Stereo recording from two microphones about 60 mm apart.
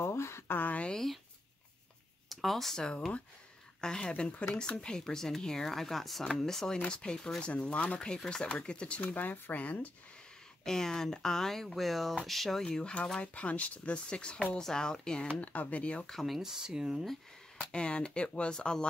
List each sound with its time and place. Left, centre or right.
0.0 s a sound: left
0.5 s a sound: left
0.8 s a sound: centre
2.2 s a woman's voice: centre; by 9.8 s left
10.6 s speech: centre
12.6 s a woman's voice: centre
16.1 s speech: centre
16.3 s speech: centre
17.6 s a woman's voice: centre